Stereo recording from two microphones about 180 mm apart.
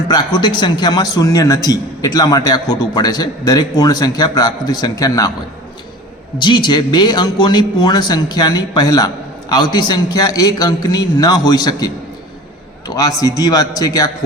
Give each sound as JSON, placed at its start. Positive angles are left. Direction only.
{"t": 0.1, "sound": "a man's voice", "side_deg": 25}
{"t": 6.4, "sound": "a man's voice", "side_deg": 25}
{"t": 12.9, "sound": "a man's voice", "side_deg": 20}